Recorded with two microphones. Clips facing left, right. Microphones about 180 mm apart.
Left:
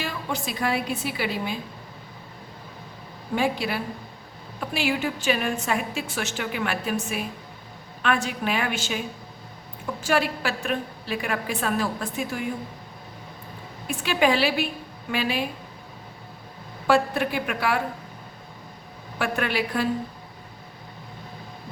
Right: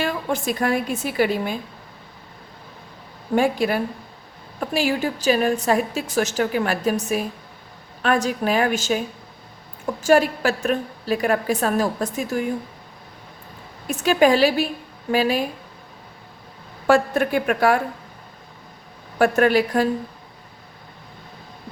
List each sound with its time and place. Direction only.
0.0 s a woman's voice: 55° right (ahead or behind)
3.3 s a woman's voice: 45° right (ahead or behind)
10.0 s a woman's voice: 45° right (ahead or behind)
13.8 s a woman's voice: 45° right (ahead or behind)
16.8 s a woman's voice: 45° right (ahead or behind)
19.2 s a woman's voice: 45° right (ahead or behind)